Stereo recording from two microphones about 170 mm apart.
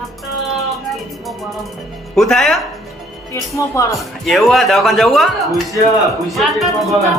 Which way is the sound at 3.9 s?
Centre (ahead or behind).